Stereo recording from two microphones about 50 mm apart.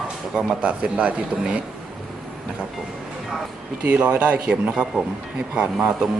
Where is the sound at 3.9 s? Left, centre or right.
Right.